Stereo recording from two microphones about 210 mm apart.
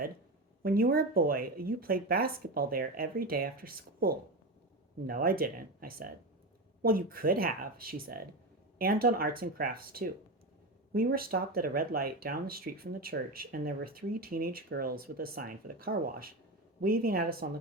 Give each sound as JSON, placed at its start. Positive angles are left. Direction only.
{"t": 0.6, "sound": "speech", "side_deg": -45}